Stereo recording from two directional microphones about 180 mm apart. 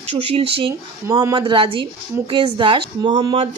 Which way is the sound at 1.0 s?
20° right (ahead or behind).